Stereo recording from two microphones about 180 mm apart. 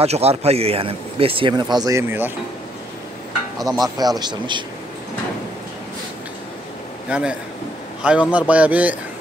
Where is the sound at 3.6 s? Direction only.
Centre (ahead or behind).